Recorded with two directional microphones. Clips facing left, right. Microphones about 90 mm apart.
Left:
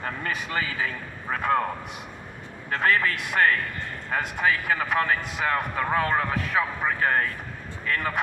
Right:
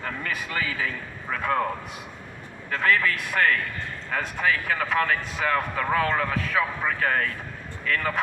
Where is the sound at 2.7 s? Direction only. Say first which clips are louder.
Even; 30° left (ahead or behind).